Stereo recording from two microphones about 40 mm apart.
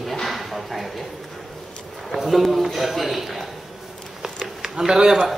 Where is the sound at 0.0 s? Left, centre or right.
Centre.